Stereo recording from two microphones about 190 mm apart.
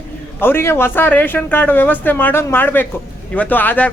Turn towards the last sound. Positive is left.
turn(degrees=10)  # may be behind; listen again after turning